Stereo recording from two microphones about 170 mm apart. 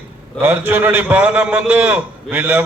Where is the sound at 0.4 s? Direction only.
10° right (ahead or behind).